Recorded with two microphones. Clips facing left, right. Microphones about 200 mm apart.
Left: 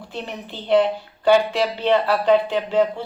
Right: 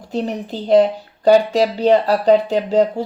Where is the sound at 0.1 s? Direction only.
40° right (ahead or behind).